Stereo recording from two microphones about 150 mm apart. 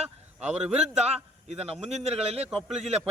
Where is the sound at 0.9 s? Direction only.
45° right (ahead or behind).